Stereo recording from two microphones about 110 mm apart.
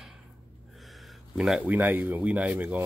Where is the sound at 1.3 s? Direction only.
5° right (ahead or behind).